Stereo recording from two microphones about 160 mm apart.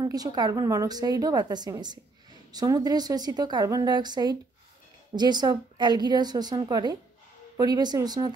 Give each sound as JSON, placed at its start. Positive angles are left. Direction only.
{"t": 0.0, "sound": "a woman's voice", "side_deg": -25}